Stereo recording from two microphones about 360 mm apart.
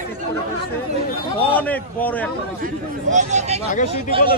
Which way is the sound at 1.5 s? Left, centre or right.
Centre.